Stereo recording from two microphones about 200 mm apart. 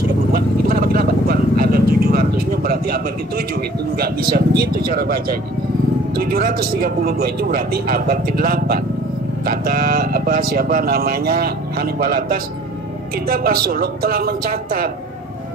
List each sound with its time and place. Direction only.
0.3 s vehicle: 50° right (ahead or behind)
6.1 s speech: 50° right (ahead or behind)